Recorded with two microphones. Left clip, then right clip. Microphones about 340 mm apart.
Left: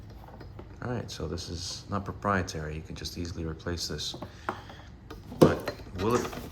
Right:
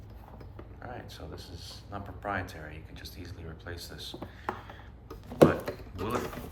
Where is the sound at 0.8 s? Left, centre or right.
Centre.